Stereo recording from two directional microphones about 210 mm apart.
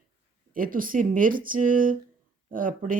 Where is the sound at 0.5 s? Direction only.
40° right (ahead or behind).